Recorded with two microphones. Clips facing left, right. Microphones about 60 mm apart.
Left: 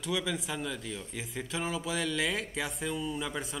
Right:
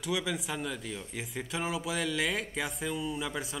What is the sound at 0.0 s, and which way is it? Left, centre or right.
Speech, centre.